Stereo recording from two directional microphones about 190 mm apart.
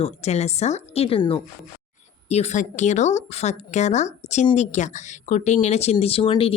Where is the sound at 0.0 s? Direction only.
35° left (ahead or behind).